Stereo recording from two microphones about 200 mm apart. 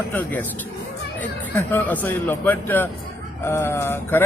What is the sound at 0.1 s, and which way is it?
Speech, 10° left (ahead or behind).